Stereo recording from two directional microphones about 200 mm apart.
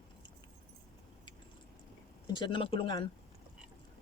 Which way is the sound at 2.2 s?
25° left (ahead or behind).